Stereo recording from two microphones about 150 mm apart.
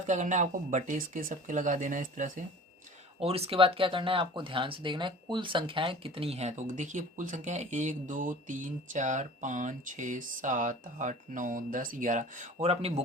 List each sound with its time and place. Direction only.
0.1 s speech: 55° right (ahead or behind)
3.2 s speech: 40° right (ahead or behind)